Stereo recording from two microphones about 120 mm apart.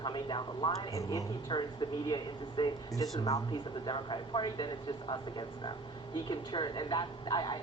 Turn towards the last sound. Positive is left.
turn(degrees=40)  # may be behind; listen again after turning